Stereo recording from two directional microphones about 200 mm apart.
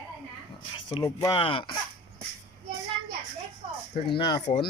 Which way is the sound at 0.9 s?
20° left (ahead or behind).